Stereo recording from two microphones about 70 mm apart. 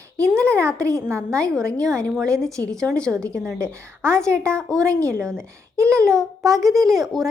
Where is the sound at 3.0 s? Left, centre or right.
Centre.